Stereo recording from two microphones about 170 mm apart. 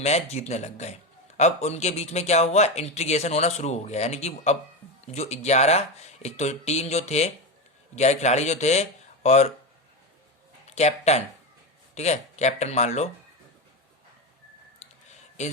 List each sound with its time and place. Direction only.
0.0 s speech: 40° left (ahead or behind)
10.7 s speech: 40° left (ahead or behind)
14.8 s a sound: 45° left (ahead or behind)